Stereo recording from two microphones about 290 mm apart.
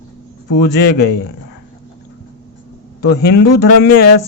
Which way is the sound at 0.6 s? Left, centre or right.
Left.